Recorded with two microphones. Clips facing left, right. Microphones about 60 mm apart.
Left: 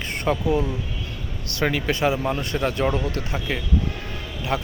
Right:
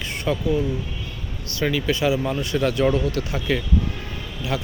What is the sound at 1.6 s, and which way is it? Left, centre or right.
Speech, left.